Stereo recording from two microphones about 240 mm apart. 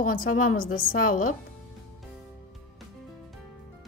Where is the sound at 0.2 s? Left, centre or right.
Left.